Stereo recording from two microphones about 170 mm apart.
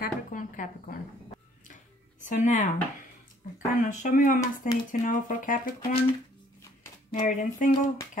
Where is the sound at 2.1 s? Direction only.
45° left (ahead or behind).